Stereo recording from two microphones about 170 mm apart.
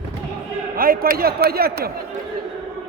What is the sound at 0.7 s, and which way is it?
Speech, 60° right (ahead or behind).